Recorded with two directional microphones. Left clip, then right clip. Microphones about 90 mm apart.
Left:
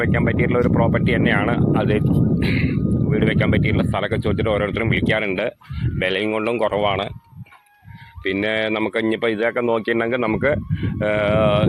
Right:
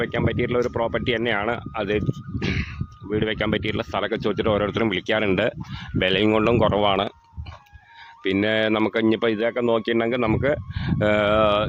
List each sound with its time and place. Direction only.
0.0 s speech: 40° right (ahead or behind)
1.3 s speech: 20° right (ahead or behind); by 4.2 s 45° right (ahead or behind)
4.2 s speech: 55° right (ahead or behind)
6.2 s speech: 70° right (ahead or behind); by 7.1 s 55° right (ahead or behind)
8.2 s speech: 50° right (ahead or behind)
9.4 s speech: 35° right (ahead or behind)